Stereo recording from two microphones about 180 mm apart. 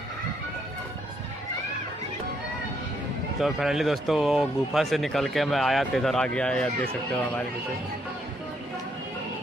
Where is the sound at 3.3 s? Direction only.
Centre (ahead or behind).